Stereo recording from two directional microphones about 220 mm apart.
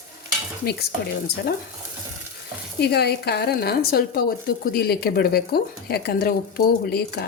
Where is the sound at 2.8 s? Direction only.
50° left (ahead or behind).